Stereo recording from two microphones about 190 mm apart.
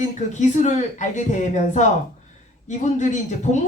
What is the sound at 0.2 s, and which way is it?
Speech, 40° left (ahead or behind).